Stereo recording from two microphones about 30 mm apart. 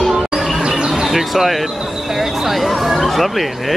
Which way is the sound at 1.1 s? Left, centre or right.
Centre.